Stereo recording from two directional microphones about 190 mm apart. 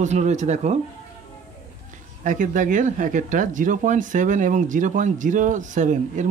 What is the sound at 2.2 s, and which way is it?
Speech, 40° right (ahead or behind).